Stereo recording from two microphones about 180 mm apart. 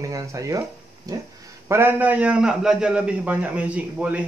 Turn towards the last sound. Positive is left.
turn(degrees=-5)  # may be behind; listen again after turning